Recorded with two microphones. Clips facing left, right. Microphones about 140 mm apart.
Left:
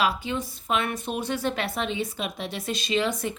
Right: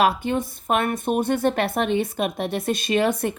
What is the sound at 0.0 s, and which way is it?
Speech, 55° right (ahead or behind).